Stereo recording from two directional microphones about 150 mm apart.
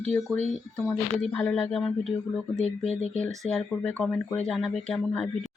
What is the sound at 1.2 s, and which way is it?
Speech, 5° left (ahead or behind).